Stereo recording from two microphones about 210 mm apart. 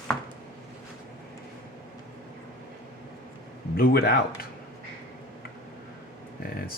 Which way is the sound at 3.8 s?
45° left (ahead or behind).